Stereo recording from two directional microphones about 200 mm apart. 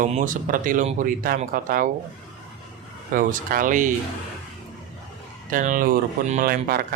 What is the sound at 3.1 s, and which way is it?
Speech, 40° right (ahead or behind).